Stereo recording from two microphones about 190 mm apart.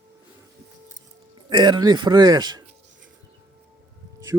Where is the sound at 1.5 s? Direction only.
20° right (ahead or behind).